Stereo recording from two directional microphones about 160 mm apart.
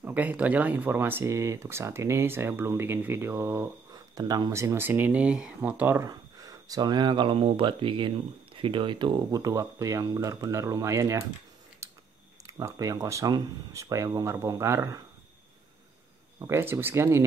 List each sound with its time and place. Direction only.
0.0 s speech: 10° right (ahead or behind)
6.0 s speech: 20° right (ahead or behind)
11.8 s chewing: 20° right (ahead or behind)
12.4 s speech: 20° right (ahead or behind)
16.3 s speech: 15° right (ahead or behind)